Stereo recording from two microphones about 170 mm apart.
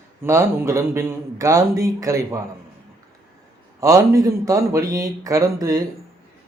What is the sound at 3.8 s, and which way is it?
Speech, 20° right (ahead or behind).